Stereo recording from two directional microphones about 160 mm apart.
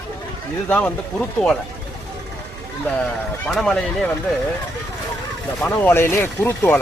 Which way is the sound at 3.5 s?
5° left (ahead or behind).